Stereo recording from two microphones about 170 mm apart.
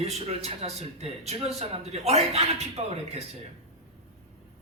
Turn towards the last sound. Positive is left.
turn(degrees=-35)  # may be behind; listen again after turning